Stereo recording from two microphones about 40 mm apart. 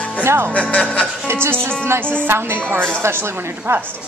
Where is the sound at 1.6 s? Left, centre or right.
Left.